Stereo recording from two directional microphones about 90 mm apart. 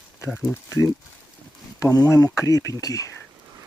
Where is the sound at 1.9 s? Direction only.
40° left (ahead or behind).